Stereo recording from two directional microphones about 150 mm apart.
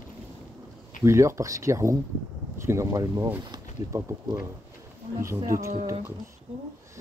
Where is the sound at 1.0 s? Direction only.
20° right (ahead or behind).